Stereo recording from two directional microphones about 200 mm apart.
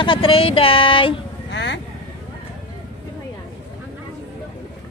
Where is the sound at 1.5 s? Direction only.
60° left (ahead or behind).